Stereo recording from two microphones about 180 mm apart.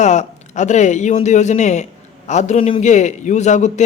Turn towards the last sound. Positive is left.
turn(degrees=40)  # may be behind; listen again after turning